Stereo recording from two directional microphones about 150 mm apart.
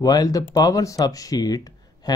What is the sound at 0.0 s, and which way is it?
Speech, 25° left (ahead or behind).